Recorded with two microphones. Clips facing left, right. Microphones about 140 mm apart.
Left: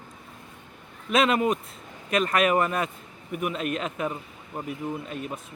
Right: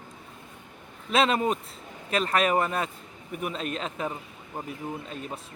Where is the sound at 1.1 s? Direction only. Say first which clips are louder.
Left 1 dB; 35° right (ahead or behind).